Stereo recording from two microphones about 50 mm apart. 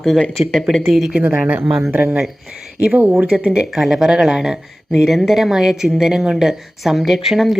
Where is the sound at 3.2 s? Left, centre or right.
Centre.